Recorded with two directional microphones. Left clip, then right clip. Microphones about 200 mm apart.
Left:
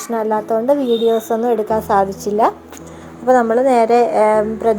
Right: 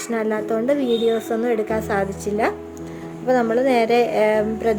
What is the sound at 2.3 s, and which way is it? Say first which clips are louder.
Speech: left 6 dB; 15° left (ahead or behind).